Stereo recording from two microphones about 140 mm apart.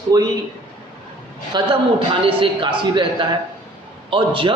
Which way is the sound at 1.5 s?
35° right (ahead or behind).